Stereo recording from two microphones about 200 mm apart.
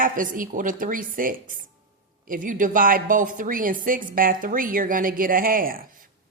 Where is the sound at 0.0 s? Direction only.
45° right (ahead or behind).